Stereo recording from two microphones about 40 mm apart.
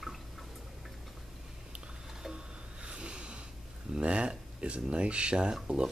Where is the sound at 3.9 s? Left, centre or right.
Right.